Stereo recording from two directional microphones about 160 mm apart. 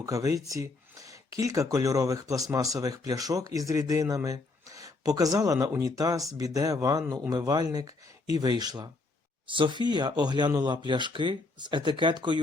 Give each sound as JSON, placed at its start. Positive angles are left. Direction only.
{"t": 0.0, "sound": "speech", "side_deg": -20}